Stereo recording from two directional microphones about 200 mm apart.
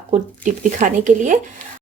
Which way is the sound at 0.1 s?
40° right (ahead or behind).